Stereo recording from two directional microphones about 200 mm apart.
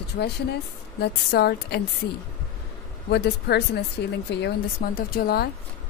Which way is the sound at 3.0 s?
55° left (ahead or behind).